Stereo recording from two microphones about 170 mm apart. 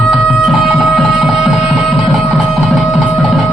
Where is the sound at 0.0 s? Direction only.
Centre (ahead or behind).